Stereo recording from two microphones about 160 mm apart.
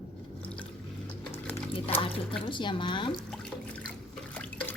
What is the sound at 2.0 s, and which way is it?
Speech, 30° left (ahead or behind).